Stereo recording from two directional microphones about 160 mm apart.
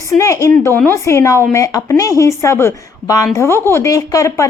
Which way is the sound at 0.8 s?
15° left (ahead or behind).